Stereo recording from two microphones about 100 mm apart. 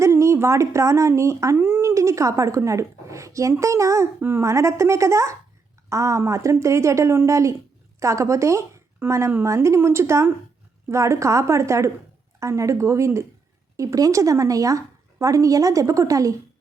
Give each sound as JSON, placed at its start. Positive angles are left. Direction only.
{"t": 0.0, "sound": "speech", "side_deg": -30}
{"t": 1.5, "sound": "a woman's voice", "side_deg": -20}